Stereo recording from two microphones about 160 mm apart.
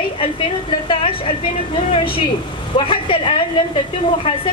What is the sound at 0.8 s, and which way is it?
Speech, 35° left (ahead or behind).